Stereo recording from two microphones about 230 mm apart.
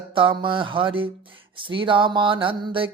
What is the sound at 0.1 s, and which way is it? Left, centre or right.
Mantra, right.